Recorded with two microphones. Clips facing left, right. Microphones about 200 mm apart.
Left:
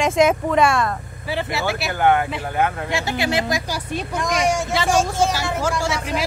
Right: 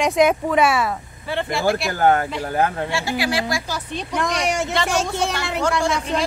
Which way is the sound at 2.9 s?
20° left (ahead or behind).